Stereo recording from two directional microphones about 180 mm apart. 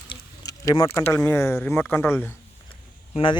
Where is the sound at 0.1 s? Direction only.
25° left (ahead or behind).